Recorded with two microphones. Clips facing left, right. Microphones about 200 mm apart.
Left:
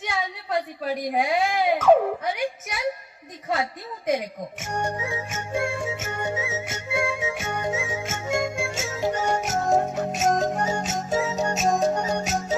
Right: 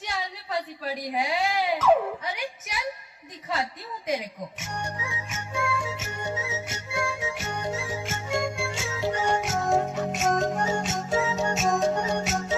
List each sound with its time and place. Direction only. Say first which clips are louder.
0.0 s baby cry: left 4 dB; 55° left (ahead or behind)
3.5 s a woman's voice: left 4 dB; 55° left (ahead or behind)
4.6 s music: left 8 dB; 55° left (ahead or behind); by 12.5 s 40° left (ahead or behind)